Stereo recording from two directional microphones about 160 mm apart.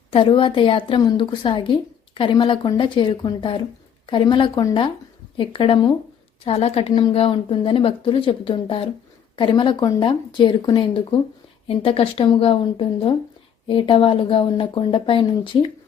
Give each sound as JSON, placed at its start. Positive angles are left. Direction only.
{"t": 0.1, "sound": "a woman's voice", "side_deg": 35}